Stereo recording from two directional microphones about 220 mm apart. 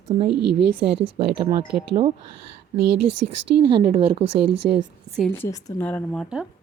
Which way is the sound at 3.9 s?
30° right (ahead or behind).